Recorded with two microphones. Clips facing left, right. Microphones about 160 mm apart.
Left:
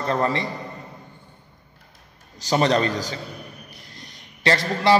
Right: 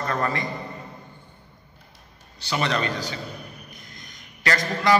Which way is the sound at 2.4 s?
35° left (ahead or behind).